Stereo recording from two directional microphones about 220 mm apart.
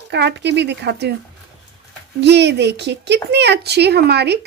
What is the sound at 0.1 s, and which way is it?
Speech, 50° right (ahead or behind).